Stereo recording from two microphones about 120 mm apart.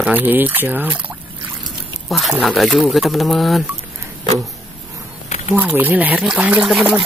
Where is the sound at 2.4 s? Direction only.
Centre (ahead or behind).